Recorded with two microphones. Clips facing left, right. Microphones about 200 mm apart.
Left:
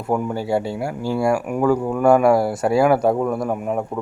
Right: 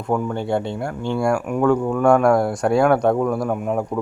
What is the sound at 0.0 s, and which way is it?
Speech, 10° left (ahead or behind).